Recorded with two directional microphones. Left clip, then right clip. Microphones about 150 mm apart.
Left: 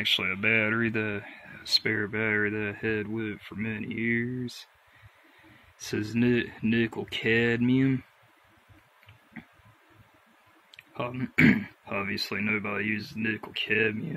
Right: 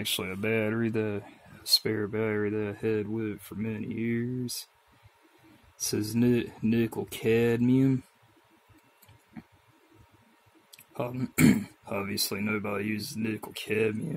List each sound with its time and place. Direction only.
0.0 s speech: 30° right (ahead or behind)
5.8 s speech: 25° right (ahead or behind)
10.7 s speech: 25° right (ahead or behind)